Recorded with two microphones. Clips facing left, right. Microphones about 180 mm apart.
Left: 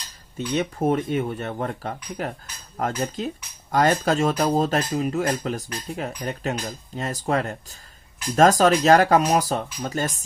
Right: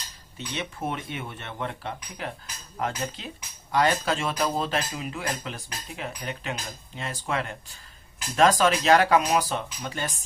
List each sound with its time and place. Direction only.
0.3 s speech: 45° left (ahead or behind)